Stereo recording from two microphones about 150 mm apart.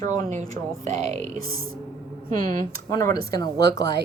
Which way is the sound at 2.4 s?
65° right (ahead or behind).